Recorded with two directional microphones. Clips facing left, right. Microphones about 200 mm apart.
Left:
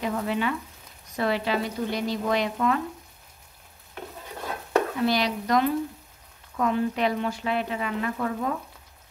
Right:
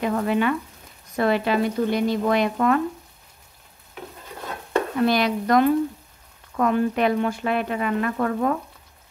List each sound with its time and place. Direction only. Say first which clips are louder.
0.0 s speech: right 5 dB; 55° right (ahead or behind)
5.0 s speech: right 4 dB; 55° right (ahead or behind)